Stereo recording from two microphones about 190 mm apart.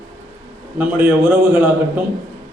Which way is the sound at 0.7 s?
10° right (ahead or behind).